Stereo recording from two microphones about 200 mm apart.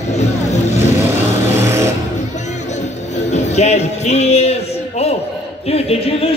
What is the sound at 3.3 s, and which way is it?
Music, 35° left (ahead or behind).